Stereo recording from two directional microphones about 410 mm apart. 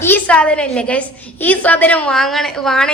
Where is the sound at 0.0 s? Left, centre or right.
Centre.